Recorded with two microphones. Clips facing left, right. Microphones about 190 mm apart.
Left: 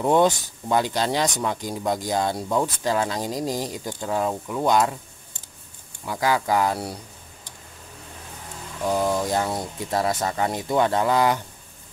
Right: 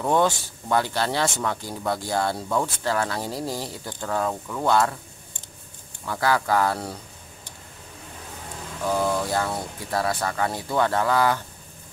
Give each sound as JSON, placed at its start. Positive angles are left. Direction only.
{"t": 0.0, "sound": "speech", "side_deg": 20}
{"t": 6.0, "sound": "speech", "side_deg": 15}
{"t": 8.9, "sound": "speech", "side_deg": 15}